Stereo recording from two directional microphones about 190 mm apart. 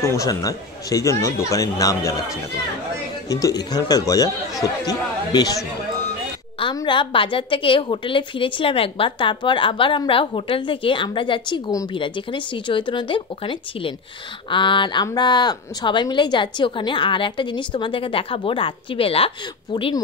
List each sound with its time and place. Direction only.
0.0 s speech: 15° left (ahead or behind)
3.3 s speech: 20° left (ahead or behind)